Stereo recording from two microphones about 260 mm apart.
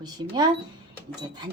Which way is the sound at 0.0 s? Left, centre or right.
Centre.